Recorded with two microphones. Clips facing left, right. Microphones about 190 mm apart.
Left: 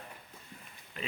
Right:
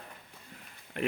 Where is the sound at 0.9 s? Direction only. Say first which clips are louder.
Right 9 dB; 65° right (ahead or behind).